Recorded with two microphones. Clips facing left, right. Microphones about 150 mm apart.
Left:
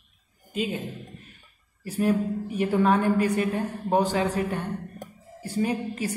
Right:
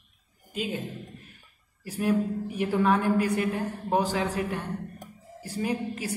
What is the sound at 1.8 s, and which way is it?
A woman's voice, 5° right (ahead or behind).